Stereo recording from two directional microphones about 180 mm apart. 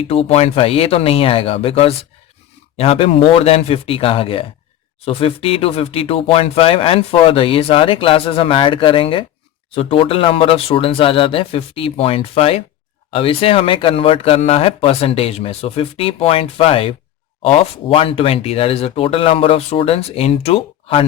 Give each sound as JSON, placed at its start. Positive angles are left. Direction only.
{"t": 0.1, "sound": "speech", "side_deg": 35}